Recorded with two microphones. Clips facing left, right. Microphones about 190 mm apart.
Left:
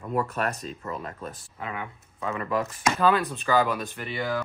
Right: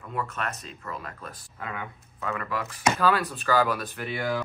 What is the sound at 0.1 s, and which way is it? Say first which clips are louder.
Speech: left 5 dB; 40° left (ahead or behind).